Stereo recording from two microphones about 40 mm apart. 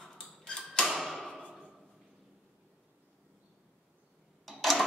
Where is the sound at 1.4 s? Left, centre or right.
Left.